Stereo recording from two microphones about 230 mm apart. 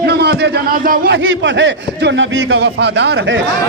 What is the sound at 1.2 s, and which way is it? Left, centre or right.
A man's voice, right.